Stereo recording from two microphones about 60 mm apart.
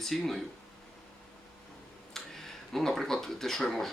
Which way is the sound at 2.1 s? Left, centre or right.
Centre.